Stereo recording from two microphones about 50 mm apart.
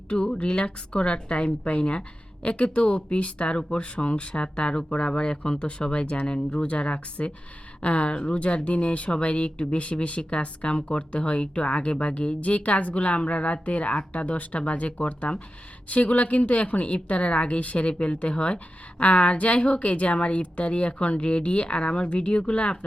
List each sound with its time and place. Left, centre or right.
0.1 s a woman's voice: centre